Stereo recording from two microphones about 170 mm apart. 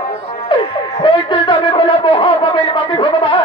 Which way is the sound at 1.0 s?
30° left (ahead or behind).